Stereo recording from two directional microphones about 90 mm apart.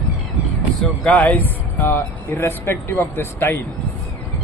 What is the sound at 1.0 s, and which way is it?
Speech, 15° left (ahead or behind).